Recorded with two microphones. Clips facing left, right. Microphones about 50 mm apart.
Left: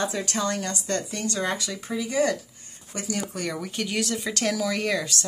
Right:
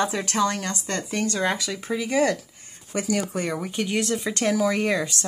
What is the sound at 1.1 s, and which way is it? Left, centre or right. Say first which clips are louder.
Speech: right 3 dB; right.